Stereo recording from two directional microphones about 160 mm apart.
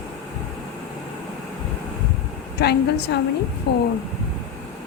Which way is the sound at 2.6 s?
90° left.